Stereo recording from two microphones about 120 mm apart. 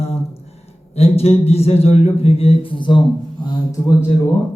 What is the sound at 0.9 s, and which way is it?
Speech, 55° left (ahead or behind).